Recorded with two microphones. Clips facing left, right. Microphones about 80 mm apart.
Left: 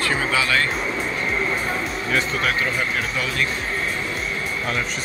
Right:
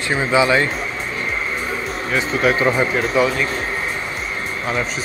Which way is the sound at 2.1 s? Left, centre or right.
Centre.